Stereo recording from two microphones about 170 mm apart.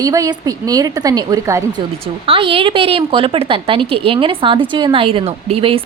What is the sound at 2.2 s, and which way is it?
A woman's voice, 30° right (ahead or behind).